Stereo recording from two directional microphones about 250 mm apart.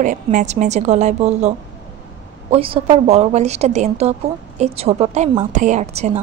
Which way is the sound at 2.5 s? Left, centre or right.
Right.